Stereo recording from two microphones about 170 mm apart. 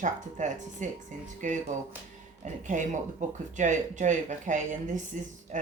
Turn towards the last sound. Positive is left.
turn(degrees=-45)  # may be behind; listen again after turning